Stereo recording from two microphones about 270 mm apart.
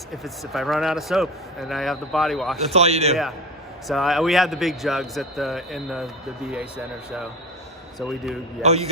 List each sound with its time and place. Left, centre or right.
0.5 s a man's voice: centre
2.6 s a man's voice: right
3.8 s a man's voice: centre
8.6 s a man's voice: right